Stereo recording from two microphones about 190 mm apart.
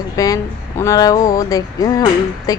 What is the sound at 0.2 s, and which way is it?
Speech, 15° left (ahead or behind).